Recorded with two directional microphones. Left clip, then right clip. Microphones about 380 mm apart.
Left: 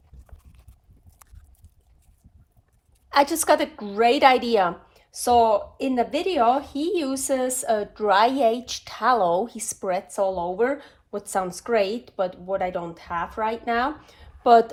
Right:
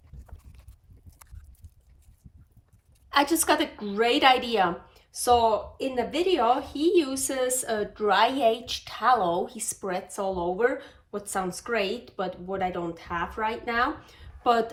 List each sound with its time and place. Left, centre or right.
3.1 s a woman's voice: centre